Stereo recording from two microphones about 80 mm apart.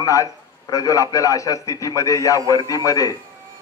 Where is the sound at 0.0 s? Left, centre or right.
Left.